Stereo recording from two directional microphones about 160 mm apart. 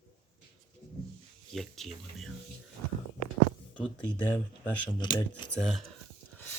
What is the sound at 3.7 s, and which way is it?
Speech, 5° left (ahead or behind).